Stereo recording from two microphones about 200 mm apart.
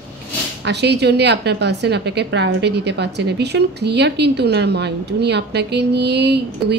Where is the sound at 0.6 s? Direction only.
60° right (ahead or behind).